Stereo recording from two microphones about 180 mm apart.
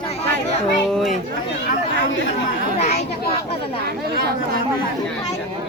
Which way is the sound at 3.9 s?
65° right (ahead or behind).